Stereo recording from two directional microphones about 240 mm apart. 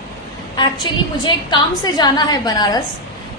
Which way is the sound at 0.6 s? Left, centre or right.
Centre.